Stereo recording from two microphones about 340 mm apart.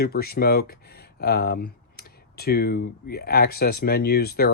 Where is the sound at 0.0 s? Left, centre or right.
Left.